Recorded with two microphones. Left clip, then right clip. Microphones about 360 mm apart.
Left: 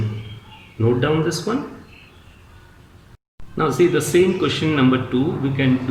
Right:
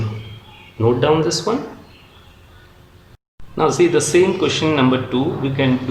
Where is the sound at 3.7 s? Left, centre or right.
Centre.